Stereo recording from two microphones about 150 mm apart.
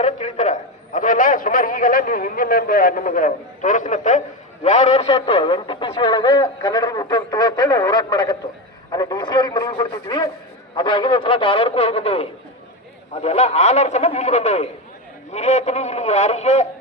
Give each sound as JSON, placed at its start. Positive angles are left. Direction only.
{"t": 0.0, "sound": "a man's voice", "side_deg": 50}